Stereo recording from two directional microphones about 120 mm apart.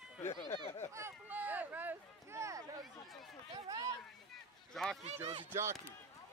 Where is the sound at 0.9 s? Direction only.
20° right (ahead or behind).